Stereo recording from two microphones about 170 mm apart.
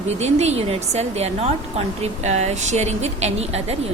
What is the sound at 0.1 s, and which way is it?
A woman's voice, 40° right (ahead or behind).